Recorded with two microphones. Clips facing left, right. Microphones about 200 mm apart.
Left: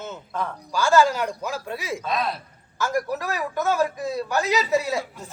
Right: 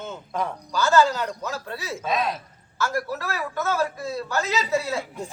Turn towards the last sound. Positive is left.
turn(degrees=15)  # may be behind; listen again after turning